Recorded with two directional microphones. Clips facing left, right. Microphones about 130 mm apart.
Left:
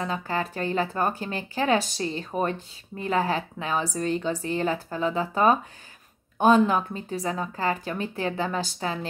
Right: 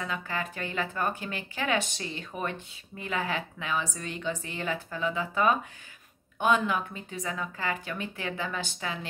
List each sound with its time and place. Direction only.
0.0 s a woman's voice: 35° left (ahead or behind)